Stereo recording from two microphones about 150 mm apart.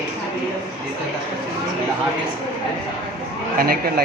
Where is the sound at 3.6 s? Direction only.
85° right.